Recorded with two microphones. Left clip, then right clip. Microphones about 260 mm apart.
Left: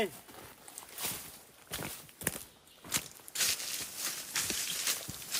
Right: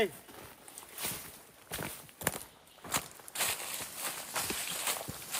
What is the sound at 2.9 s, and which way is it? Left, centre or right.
Walk, centre.